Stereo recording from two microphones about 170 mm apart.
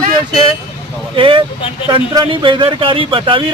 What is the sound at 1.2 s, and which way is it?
A man's voice, 30° right (ahead or behind).